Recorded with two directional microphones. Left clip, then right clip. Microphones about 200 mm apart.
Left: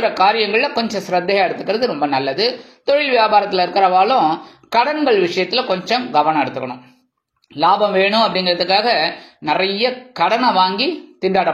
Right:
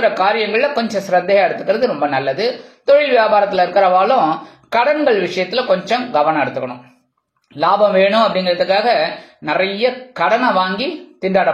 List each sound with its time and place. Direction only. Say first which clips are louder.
0.0 s speech: even; 25° left (ahead or behind)